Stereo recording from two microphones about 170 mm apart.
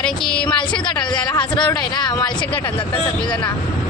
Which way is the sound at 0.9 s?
25° left (ahead or behind).